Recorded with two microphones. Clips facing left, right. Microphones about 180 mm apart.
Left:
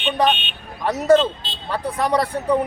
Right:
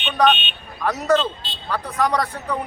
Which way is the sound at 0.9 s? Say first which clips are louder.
Left 4 dB; 30° left (ahead or behind).